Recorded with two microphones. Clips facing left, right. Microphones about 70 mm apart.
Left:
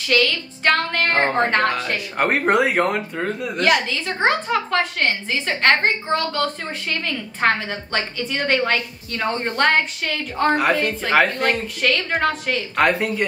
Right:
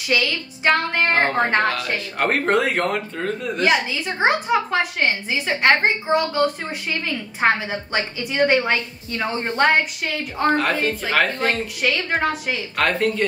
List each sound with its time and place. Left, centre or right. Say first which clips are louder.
0.1 s a woman's voice: left 2 dB; centre
1.1 s a woman's voice: left 1 dB; centre
1.4 s a woman's voice: even; centre
2.1 s speech: left 2 dB; centre
3.5 s a woman's voice: left 1 dB; centre
9.7 s a woman's voice: even; centre
10.5 s a woman's voice: left 1 dB; centre
11.4 s a woman's voice: left 1 dB; centre
12.7 s speech: left 1 dB; centre